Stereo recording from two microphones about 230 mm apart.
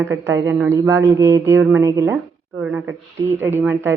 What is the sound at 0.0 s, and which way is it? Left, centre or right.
Speech, centre.